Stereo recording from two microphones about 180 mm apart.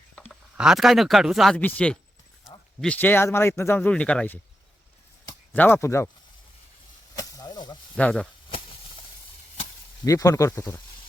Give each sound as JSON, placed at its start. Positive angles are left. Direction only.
{"t": 0.5, "sound": "speech", "side_deg": -5}
{"t": 5.5, "sound": "speech", "side_deg": 10}
{"t": 7.2, "sound": "a sound", "side_deg": 20}
{"t": 7.9, "sound": "speech", "side_deg": 5}
{"t": 10.1, "sound": "speech", "side_deg": 20}